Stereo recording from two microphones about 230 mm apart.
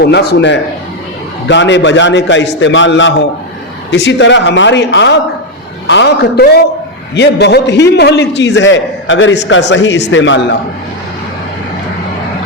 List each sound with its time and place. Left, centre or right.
0.0 s a man's voice: left